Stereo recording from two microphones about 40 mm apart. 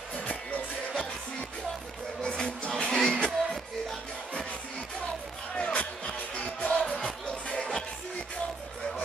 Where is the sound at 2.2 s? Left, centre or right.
Left.